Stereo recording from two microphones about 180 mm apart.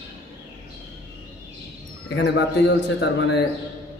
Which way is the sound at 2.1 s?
70° left (ahead or behind).